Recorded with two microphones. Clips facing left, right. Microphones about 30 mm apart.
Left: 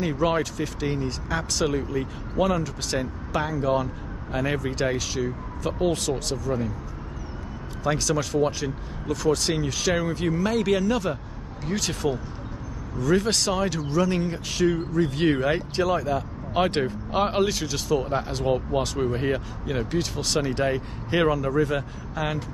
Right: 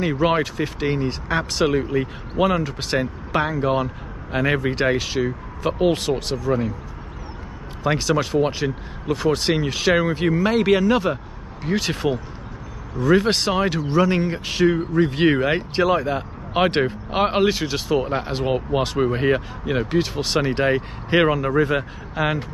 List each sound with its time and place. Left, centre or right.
0.0 s speech: right
7.8 s speech: right